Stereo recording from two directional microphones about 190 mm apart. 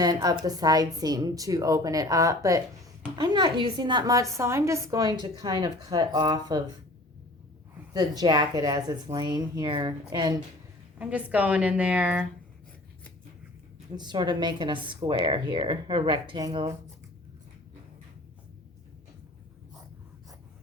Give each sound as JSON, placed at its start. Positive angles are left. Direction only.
{"t": 0.0, "sound": "a woman's voice", "side_deg": -20}
{"t": 7.9, "sound": "a woman's voice", "side_deg": -20}
{"t": 10.9, "sound": "a woman's voice", "side_deg": -5}
{"t": 13.9, "sound": "a woman's voice", "side_deg": -20}